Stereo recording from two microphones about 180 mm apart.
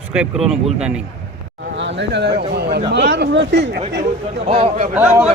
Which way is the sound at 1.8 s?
80° right.